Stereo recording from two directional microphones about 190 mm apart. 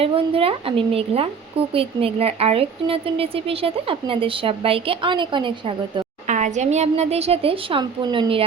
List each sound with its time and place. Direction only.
0.0 s a woman's voice: 30° right (ahead or behind)
6.2 s a woman's voice: 40° right (ahead or behind)